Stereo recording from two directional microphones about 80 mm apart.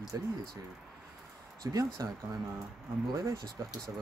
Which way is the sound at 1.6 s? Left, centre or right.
Right.